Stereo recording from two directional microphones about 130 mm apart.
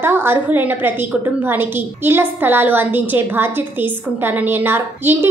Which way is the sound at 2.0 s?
15° right (ahead or behind).